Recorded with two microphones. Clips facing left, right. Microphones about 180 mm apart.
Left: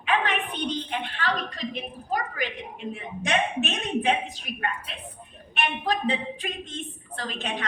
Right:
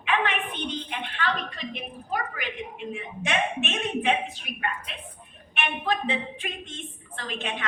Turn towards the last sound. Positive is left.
turn(degrees=40)  # may be behind; listen again after turning